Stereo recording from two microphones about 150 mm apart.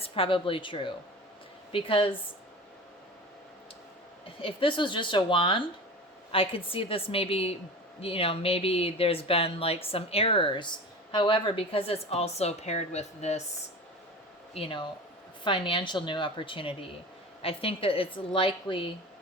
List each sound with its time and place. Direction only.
0.0 s speech: 35° left (ahead or behind)
4.4 s speech: 35° left (ahead or behind)
14.5 s speech: 35° left (ahead or behind)